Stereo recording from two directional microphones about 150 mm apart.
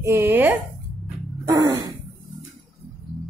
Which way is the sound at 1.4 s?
20° right (ahead or behind).